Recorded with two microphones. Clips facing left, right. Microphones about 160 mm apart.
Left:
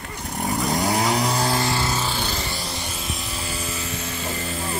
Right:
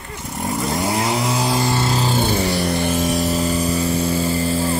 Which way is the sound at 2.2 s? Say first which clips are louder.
Right 10 dB; 60° right (ahead or behind).